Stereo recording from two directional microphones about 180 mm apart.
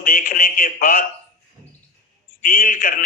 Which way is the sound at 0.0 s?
50° left (ahead or behind).